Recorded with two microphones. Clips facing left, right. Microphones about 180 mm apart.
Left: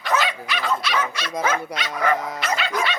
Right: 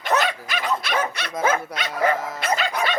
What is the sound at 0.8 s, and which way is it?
Speech, 50° right (ahead or behind).